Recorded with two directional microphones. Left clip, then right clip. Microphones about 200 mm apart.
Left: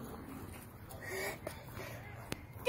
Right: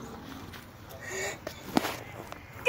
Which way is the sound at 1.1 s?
5° left (ahead or behind).